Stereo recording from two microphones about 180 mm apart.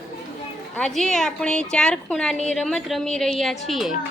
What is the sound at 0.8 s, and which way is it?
A woman's voice, centre (ahead or behind).